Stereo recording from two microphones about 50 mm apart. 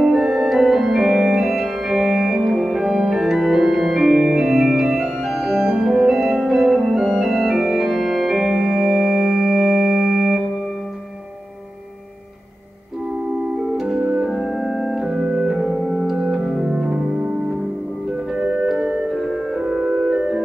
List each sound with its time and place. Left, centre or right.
0.0 s organ: centre
13.7 s organ: centre
14.2 s organ: centre
16.7 s music: centre
18.3 s organ: centre
18.7 s music: centre